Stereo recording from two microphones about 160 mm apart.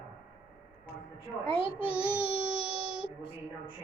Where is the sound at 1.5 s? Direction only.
35° left (ahead or behind).